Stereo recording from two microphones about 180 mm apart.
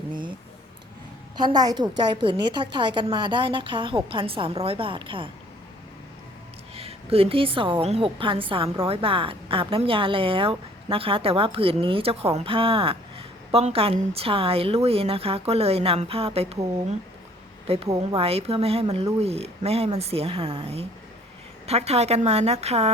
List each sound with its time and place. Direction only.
0.1 s a sound: 25° right (ahead or behind)
1.4 s a woman's voice: 20° right (ahead or behind)
6.7 s speech: 35° right (ahead or behind)
17.7 s speech: 35° right (ahead or behind)
21.7 s speech: 35° right (ahead or behind)